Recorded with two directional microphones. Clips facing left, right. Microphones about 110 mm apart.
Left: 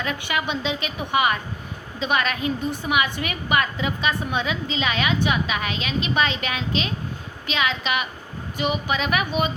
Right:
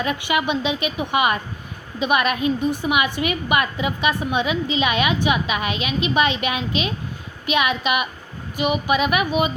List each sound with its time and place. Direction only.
0.0 s a woman's voice: 20° right (ahead or behind)